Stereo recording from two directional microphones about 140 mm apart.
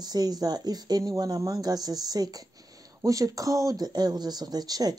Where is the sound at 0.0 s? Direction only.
30° right (ahead or behind).